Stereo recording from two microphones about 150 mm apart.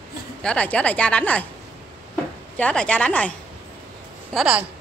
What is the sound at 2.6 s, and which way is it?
Speech, 10° left (ahead or behind).